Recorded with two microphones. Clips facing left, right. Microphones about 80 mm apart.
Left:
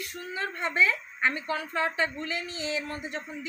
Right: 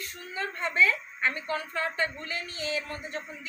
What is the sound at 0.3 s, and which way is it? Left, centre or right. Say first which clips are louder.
Speech: even; centre.